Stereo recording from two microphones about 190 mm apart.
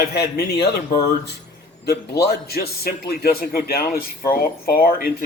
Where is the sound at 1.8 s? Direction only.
55° left (ahead or behind).